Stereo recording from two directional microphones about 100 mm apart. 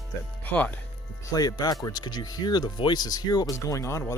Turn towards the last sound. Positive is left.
turn(degrees=30)  # may be behind; listen again after turning